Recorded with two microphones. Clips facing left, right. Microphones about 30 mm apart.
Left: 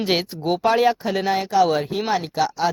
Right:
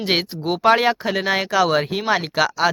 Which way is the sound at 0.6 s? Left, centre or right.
Right.